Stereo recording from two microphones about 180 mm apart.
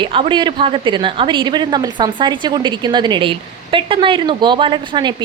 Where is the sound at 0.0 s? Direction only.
25° right (ahead or behind).